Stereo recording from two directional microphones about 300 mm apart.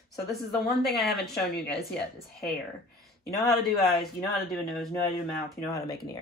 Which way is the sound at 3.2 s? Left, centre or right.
Centre.